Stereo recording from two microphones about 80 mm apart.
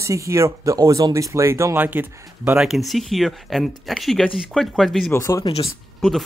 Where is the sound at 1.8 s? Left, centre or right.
Right.